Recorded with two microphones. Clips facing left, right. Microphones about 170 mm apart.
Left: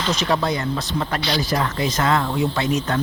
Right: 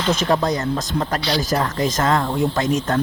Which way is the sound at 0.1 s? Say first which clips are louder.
Right 3 dB; 50° right (ahead or behind).